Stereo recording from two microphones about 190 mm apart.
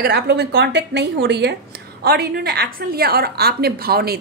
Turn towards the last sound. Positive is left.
turn(degrees=-55)  # may be behind; listen again after turning